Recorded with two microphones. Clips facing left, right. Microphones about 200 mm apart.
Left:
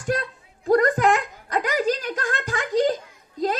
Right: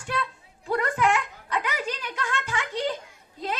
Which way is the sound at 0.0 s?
40° left (ahead or behind).